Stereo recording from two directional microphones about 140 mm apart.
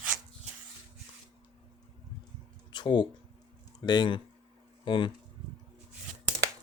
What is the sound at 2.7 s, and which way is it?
Speech, 35° left (ahead or behind).